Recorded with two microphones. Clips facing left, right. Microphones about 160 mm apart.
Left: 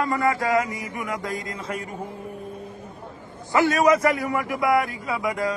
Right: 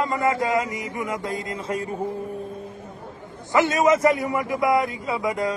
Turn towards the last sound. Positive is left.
turn(degrees=-25)  # may be behind; listen again after turning